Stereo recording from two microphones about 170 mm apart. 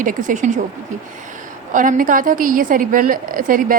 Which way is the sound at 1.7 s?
50° right (ahead or behind).